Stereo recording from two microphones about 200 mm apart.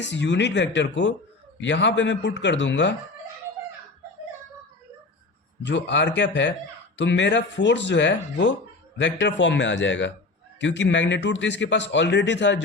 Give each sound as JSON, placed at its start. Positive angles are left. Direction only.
{"t": 0.0, "sound": "a man's voice", "side_deg": 60}
{"t": 5.6, "sound": "a man's voice", "side_deg": 60}